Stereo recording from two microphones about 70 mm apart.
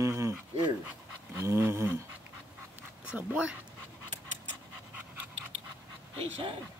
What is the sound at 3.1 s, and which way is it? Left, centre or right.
Speech, centre.